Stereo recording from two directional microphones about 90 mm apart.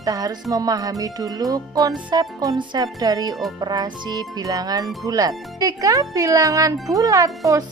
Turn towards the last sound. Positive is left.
turn(degrees=-40)  # may be behind; listen again after turning